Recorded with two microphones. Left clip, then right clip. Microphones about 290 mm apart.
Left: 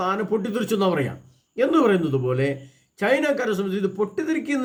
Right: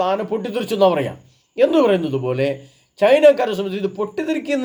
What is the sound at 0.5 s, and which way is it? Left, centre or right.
Speech, right.